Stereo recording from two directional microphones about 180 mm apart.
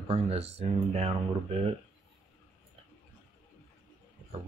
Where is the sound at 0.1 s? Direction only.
35° right (ahead or behind).